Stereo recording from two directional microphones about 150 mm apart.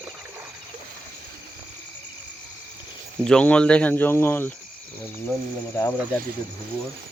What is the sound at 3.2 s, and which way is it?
Speech, 5° left (ahead or behind).